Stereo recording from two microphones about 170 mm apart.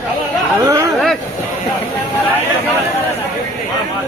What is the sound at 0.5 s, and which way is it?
Chatter, 20° right (ahead or behind).